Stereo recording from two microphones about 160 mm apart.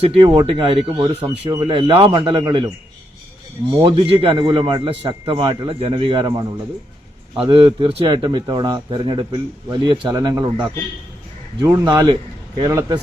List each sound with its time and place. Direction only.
0.0 s a man's voice: 35° right (ahead or behind)
3.8 s a man's voice: 35° right (ahead or behind)